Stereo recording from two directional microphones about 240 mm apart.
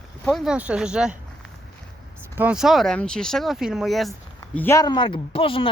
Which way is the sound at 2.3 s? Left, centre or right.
Centre.